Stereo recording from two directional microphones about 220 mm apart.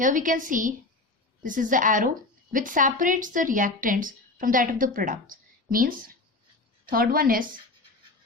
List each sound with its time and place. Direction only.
0.0 s a woman's voice: 35° right (ahead or behind)